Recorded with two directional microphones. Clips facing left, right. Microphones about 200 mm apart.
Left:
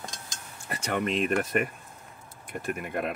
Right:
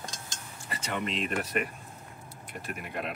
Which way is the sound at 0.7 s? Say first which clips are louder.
Left 5 dB; 50° left (ahead or behind).